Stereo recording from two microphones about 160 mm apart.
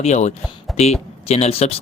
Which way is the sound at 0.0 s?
45° left (ahead or behind).